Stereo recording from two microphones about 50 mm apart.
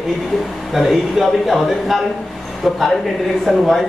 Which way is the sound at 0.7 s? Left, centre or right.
Centre.